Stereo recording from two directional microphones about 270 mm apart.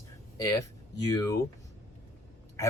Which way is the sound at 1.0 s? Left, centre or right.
Centre.